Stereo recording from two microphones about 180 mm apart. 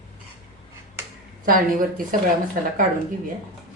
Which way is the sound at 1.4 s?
50° right (ahead or behind).